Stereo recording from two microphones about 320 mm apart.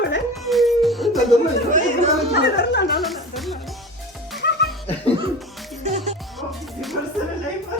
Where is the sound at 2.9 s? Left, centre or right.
Centre.